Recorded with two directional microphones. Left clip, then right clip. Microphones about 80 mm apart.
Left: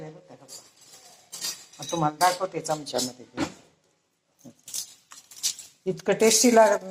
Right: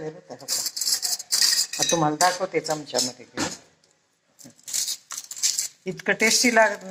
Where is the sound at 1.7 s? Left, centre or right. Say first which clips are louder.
Right 5 dB; right.